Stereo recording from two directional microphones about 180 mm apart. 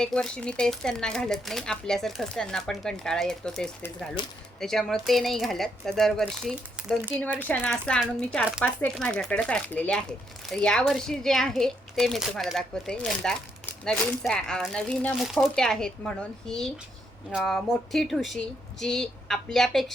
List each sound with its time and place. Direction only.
0.0 s speech: 5° left (ahead or behind)
4.2 s speech: 25° left (ahead or behind)
4.6 s speech: centre (ahead or behind)